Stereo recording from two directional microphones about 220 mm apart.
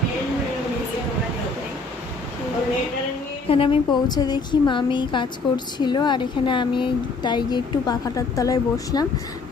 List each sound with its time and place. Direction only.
3.5 s a woman's voice: 25° left (ahead or behind)